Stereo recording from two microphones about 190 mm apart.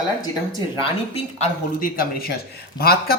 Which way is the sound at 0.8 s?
35° left (ahead or behind).